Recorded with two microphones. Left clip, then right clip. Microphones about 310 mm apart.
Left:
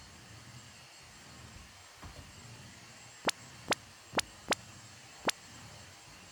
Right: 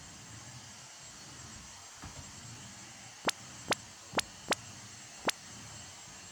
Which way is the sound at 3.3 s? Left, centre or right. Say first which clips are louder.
Even; centre.